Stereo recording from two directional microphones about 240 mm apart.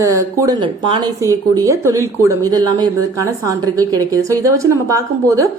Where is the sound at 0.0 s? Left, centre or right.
Centre.